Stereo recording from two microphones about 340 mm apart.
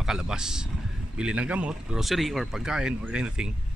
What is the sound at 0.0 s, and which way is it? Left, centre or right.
Speech, centre.